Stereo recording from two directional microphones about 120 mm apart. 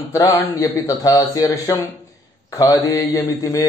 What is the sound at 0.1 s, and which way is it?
A man's voice, 30° left (ahead or behind).